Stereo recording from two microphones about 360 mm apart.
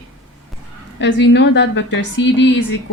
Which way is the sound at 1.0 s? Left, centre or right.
Left.